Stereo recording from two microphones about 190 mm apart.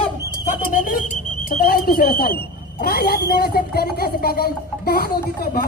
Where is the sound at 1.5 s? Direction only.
50° left (ahead or behind).